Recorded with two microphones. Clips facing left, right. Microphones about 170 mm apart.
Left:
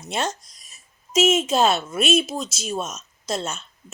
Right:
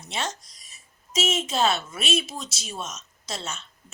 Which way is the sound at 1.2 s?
45° left (ahead or behind).